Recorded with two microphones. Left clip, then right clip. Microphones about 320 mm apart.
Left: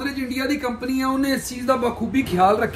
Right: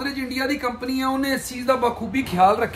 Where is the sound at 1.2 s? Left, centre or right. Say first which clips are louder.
Left 1 dB; centre.